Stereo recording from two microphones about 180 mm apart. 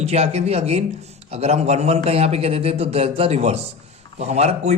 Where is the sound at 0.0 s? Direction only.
35° right (ahead or behind).